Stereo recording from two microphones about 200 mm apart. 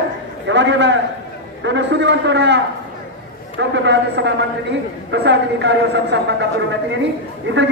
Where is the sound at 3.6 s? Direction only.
60° right (ahead or behind).